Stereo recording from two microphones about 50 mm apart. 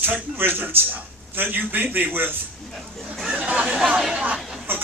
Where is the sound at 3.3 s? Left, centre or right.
Right.